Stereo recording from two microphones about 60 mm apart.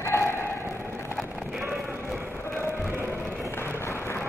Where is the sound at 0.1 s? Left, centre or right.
Left.